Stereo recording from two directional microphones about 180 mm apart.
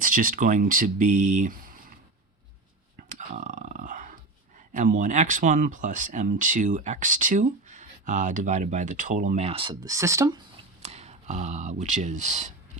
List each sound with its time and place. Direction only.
0.0 s speech: 50° right (ahead or behind)
3.2 s a sound: 45° right (ahead or behind)
4.7 s speech: 45° right (ahead or behind); by 10.4 s 20° right (ahead or behind)
10.8 s speech: 35° right (ahead or behind)